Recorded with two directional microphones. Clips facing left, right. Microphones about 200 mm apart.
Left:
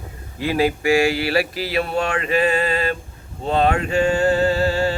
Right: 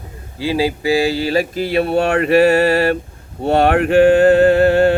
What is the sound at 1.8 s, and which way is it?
Mantra, 60° right (ahead or behind).